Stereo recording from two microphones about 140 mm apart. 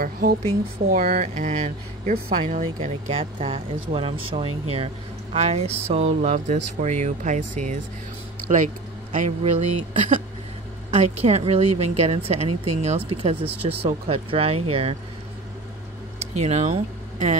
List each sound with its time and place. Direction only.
0.0 s a woman's voice: 90° right
1.3 s speech: 55° right (ahead or behind)
2.6 s speech: 45° right (ahead or behind); by 7.8 s 65° right (ahead or behind)
8.4 s speech: 25° right (ahead or behind)
9.4 s speech: 50° right (ahead or behind)
16.3 s speech: 55° right (ahead or behind)